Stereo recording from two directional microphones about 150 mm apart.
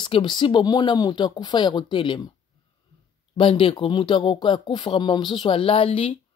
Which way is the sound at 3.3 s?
35° left (ahead or behind).